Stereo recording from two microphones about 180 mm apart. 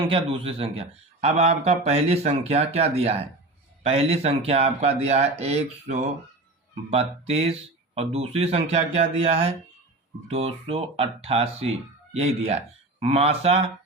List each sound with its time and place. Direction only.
0.1 s a man's voice: 30° right (ahead or behind)